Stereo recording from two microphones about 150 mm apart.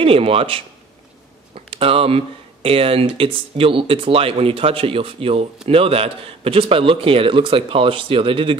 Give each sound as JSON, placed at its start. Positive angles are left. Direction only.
{"t": 0.0, "sound": "speech", "side_deg": -40}